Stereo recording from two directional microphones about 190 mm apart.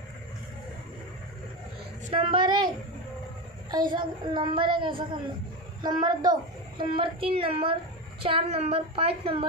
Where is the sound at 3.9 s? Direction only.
25° right (ahead or behind).